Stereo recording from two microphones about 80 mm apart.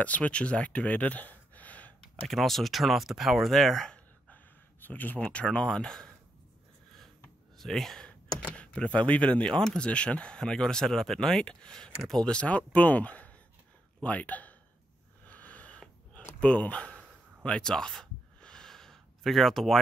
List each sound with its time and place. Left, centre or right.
0.0 s a sound: centre
2.2 s speech: centre
4.3 s speech: left
7.5 s speech: centre
12.4 s speech: centre
15.2 s a sound: centre